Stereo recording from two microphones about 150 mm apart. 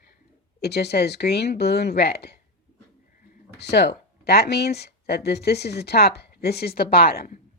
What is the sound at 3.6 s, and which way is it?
Speech, 90° left.